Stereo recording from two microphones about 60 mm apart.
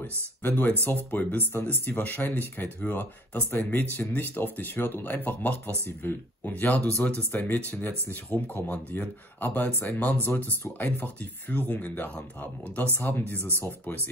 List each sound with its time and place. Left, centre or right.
0.4 s speech: left
6.5 s speech: left
8.3 s speech: left